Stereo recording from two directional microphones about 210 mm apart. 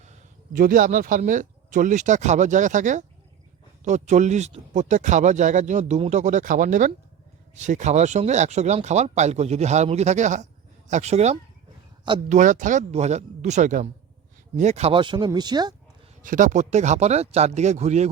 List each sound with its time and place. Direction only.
0.0 s speech: 40° right (ahead or behind); by 15.7 s 20° right (ahead or behind)
16.2 s speech: 40° right (ahead or behind)